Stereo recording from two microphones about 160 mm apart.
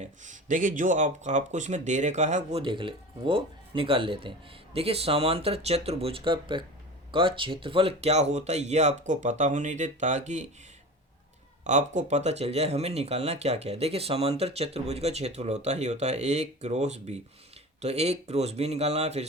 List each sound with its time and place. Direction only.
0.0 s speech: 50° right (ahead or behind)
11.6 s speech: 50° right (ahead or behind)